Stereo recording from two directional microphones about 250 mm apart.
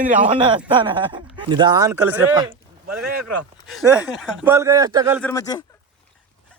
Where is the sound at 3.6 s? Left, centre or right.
Centre.